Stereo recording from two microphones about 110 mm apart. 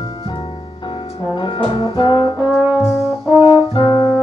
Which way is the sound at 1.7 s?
50° left (ahead or behind).